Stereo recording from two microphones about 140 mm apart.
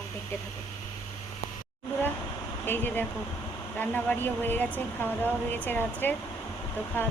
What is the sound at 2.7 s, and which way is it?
Speech, 15° left (ahead or behind).